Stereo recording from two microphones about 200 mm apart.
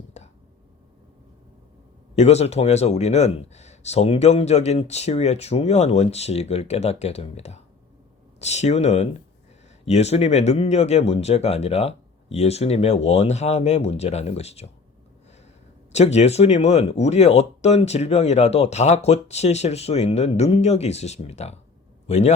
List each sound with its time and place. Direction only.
2.1 s speech: 30° left (ahead or behind)
15.9 s a man's voice: 35° left (ahead or behind)